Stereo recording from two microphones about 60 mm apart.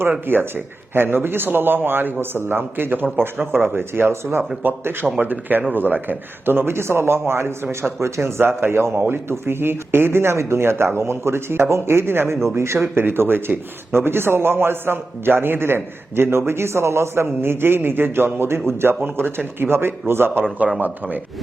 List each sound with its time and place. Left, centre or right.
0.3 s speech: right
12.9 s speech: right